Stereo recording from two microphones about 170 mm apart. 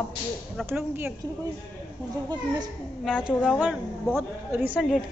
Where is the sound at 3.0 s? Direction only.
5° right (ahead or behind).